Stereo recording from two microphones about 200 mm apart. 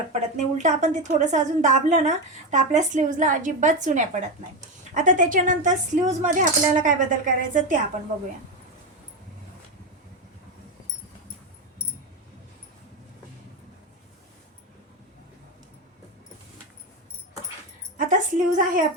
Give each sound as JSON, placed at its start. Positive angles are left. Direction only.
{"t": 0.6, "sound": "a woman's voice", "side_deg": -35}
{"t": 17.9, "sound": "a woman's voice", "side_deg": -40}